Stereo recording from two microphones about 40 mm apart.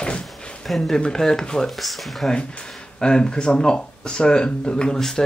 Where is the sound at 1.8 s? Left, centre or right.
Centre.